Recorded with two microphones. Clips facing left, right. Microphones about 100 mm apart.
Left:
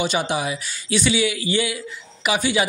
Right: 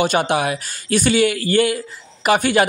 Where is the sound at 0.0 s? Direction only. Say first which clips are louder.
Right 5 dB; 55° right (ahead or behind).